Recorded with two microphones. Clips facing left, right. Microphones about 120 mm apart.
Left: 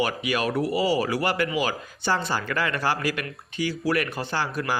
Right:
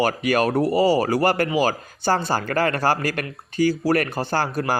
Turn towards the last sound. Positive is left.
turn(degrees=-40)  # may be behind; listen again after turning